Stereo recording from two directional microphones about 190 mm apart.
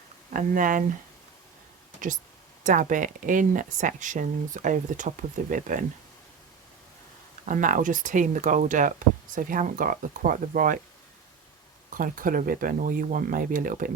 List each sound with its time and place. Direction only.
0.3 s speech: 45° right (ahead or behind)
2.0 s speech: 45° right (ahead or behind)
7.4 s speech: 45° right (ahead or behind)
11.9 s speech: 45° right (ahead or behind)